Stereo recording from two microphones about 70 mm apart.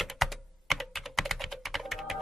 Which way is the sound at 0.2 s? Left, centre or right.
Centre.